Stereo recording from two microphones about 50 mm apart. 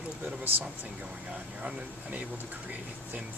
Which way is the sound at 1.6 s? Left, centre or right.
Centre.